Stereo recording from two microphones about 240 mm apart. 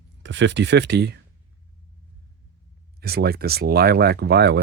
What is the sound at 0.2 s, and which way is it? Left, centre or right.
Speech, right.